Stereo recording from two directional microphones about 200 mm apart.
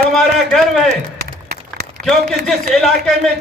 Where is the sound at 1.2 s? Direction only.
55° right (ahead or behind).